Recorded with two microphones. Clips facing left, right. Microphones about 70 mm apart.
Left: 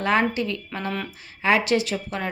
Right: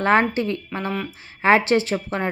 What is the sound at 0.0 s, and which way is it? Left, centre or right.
Speech, right.